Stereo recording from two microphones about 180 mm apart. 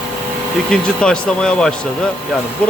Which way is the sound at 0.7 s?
5° left (ahead or behind).